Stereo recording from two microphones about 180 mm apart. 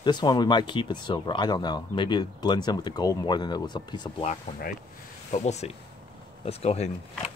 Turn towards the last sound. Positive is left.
turn(degrees=35)  # may be behind; listen again after turning